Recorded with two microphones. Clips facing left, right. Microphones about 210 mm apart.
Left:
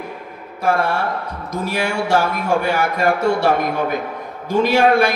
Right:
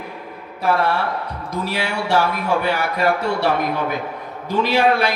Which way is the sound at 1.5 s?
45° left (ahead or behind).